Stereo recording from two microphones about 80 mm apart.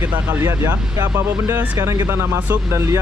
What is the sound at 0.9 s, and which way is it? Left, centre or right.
Speech, right.